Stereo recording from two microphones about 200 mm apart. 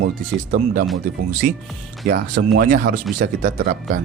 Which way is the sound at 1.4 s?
45° right (ahead or behind).